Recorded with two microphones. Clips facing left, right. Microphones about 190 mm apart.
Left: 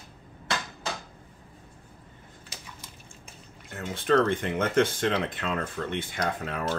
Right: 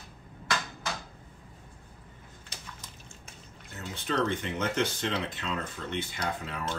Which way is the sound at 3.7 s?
50° left (ahead or behind).